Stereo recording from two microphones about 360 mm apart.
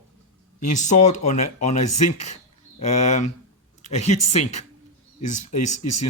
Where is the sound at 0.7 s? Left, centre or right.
Centre.